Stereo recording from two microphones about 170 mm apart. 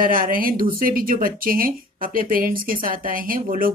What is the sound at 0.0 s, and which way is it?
A woman's voice, 55° right (ahead or behind).